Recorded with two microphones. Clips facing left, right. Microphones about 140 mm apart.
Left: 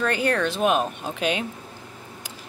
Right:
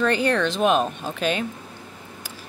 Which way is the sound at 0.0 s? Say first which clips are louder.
Right 2 dB; 5° left (ahead or behind).